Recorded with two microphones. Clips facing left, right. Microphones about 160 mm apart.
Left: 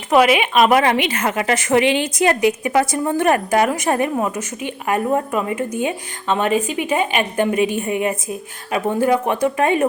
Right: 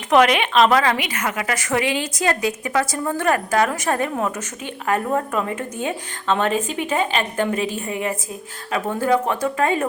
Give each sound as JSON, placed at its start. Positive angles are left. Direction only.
{"t": 0.1, "sound": "a woman's voice", "side_deg": 5}